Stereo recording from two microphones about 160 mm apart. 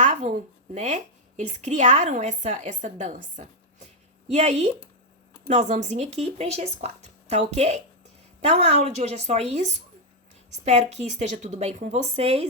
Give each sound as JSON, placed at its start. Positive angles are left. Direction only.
{"t": 0.0, "sound": "a woman's voice", "side_deg": -50}